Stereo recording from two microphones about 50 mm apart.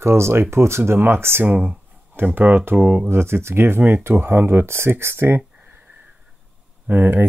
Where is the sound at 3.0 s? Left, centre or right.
Right.